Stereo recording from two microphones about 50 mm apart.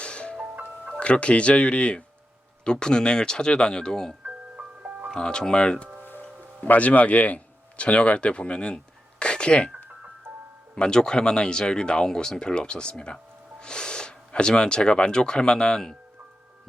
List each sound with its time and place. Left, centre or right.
0.0 s music: left
0.5 s music: right
0.9 s speech: left
4.3 s music: right
5.1 s speech: centre
6.6 s speech: left
10.8 s speech: centre